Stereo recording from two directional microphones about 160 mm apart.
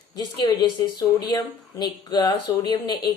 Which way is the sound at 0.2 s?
25° left (ahead or behind).